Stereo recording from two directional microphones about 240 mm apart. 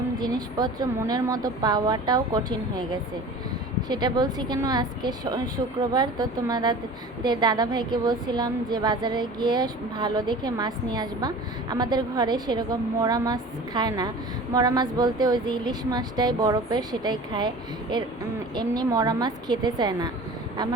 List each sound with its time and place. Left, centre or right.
0.2 s a woman's voice: centre
18.5 s a woman's voice: centre